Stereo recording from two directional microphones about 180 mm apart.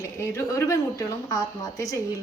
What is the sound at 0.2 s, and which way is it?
A woman's voice, 15° left (ahead or behind).